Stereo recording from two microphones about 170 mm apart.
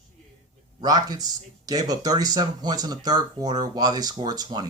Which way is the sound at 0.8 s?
25° right (ahead or behind).